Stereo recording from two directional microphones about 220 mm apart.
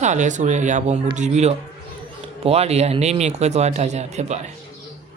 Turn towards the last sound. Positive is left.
turn(degrees=-30)  # may be behind; listen again after turning